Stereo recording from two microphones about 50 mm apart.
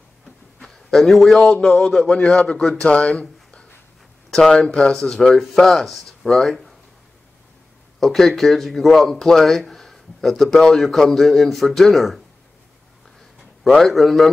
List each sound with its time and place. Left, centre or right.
0.6 s a man's voice: centre
8.0 s speech: centre
13.7 s speech: centre